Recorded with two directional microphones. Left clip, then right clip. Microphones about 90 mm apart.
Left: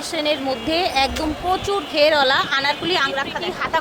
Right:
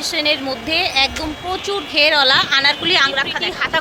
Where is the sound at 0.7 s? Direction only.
55° left (ahead or behind); by 2.7 s 20° left (ahead or behind).